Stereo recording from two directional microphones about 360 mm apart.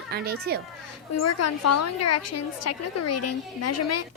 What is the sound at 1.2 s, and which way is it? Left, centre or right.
Speech, left.